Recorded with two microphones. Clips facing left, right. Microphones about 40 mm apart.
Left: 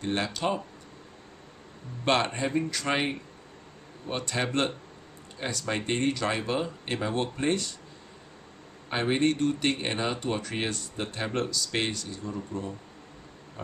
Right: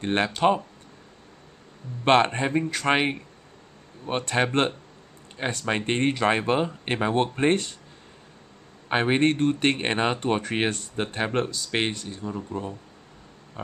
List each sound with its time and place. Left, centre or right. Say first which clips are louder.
0.0 s speech: right 7 dB; right
2.0 s speech: right 6 dB; right
8.8 s speech: right 4 dB; right